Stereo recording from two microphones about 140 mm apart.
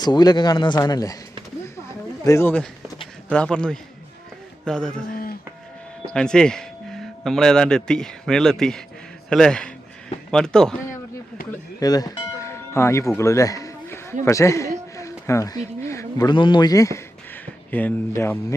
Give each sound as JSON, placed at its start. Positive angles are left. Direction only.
{"t": 0.0, "sound": "speech", "side_deg": 30}
{"t": 2.2, "sound": "a man's voice", "side_deg": 20}
{"t": 5.1, "sound": "a sound", "side_deg": 90}
{"t": 6.1, "sound": "a man's voice", "side_deg": 5}
{"t": 11.8, "sound": "music", "side_deg": 25}
{"t": 14.3, "sound": "a man's voice", "side_deg": 20}
{"t": 17.4, "sound": "speech", "side_deg": 10}